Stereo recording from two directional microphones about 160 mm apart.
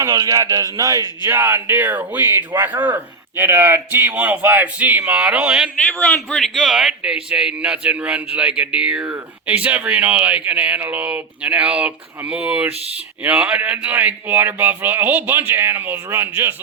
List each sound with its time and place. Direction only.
0.0 s a man's voice: 20° right (ahead or behind); by 5.7 s 5° right (ahead or behind)
5.8 s a man's voice: 10° left (ahead or behind); by 16.6 s 15° right (ahead or behind)